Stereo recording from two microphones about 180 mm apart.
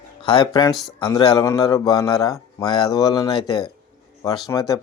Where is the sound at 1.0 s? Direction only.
20° left (ahead or behind).